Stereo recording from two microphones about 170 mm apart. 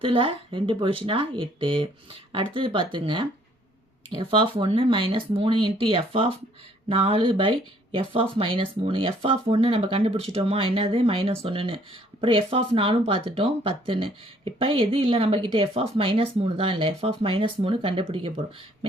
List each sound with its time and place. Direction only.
0.0 s speech: 30° right (ahead or behind)